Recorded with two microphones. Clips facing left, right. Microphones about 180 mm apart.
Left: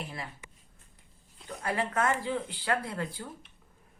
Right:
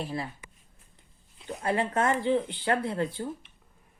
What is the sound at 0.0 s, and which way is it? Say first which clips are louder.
Speech: right 7 dB; 30° right (ahead or behind).